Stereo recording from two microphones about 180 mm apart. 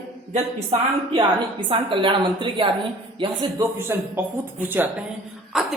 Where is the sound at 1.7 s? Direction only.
30° right (ahead or behind).